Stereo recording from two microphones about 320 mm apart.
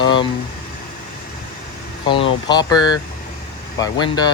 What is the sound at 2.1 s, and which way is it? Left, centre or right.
Speech, centre.